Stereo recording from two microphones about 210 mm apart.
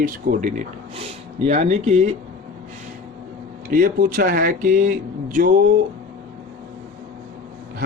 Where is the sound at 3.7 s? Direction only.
40° right (ahead or behind).